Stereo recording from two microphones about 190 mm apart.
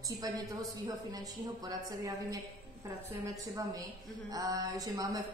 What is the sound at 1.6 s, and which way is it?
A woman's voice, 20° right (ahead or behind).